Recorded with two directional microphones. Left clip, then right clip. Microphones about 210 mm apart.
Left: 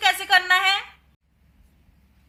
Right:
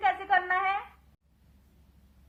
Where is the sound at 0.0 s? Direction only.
20° left (ahead or behind).